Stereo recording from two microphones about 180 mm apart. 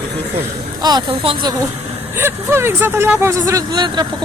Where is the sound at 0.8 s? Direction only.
25° right (ahead or behind).